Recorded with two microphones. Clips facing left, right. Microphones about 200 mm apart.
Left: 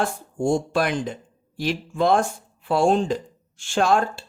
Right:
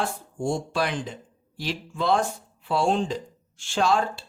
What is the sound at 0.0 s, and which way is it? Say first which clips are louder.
Speech: left 4 dB; 50° left (ahead or behind).